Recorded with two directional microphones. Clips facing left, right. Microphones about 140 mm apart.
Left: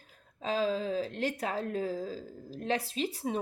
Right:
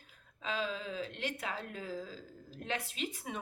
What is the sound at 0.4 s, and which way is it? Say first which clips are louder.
Speech: left 7 dB; 35° left (ahead or behind).